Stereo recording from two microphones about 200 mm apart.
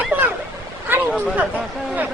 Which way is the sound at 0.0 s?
10° right (ahead or behind).